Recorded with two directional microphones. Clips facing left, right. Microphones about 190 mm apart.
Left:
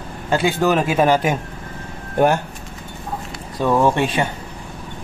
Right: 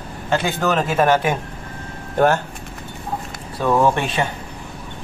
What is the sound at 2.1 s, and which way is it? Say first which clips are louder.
Speech: even; 15° left (ahead or behind).